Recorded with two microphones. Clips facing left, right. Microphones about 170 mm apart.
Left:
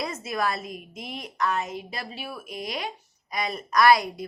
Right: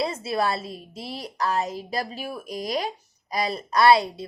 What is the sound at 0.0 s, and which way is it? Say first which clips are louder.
A woman's voice: right 3 dB; 30° right (ahead or behind).